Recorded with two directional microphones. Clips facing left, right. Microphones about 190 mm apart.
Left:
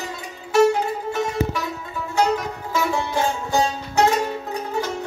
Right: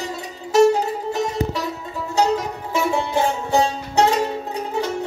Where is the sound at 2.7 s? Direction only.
25° right (ahead or behind).